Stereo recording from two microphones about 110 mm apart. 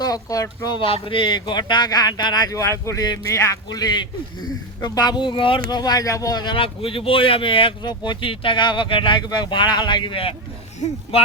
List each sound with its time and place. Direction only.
0.0 s speech: 35° left (ahead or behind)
0.8 s speech: 55° left (ahead or behind)
10.8 s speech: 90° left